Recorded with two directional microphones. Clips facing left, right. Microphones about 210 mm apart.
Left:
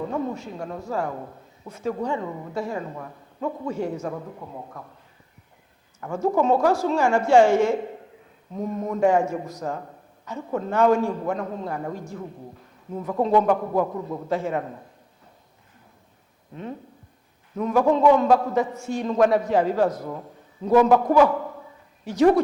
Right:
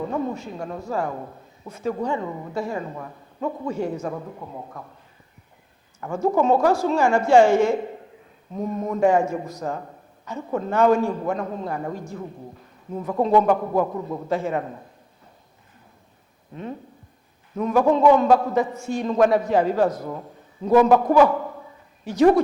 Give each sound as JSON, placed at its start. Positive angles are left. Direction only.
{"t": 0.0, "sound": "speech", "side_deg": -25}
{"t": 6.0, "sound": "a woman's voice", "side_deg": -25}
{"t": 8.5, "sound": "speech", "side_deg": -25}
{"t": 13.0, "sound": "a woman's voice", "side_deg": -25}
{"t": 17.6, "sound": "speech", "side_deg": -20}
{"t": 20.7, "sound": "a woman's voice", "side_deg": -15}